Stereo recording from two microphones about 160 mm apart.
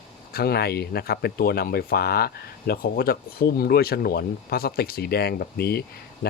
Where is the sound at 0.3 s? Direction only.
75° left (ahead or behind).